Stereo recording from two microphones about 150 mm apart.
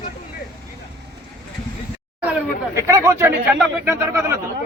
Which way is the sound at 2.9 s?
20° right (ahead or behind).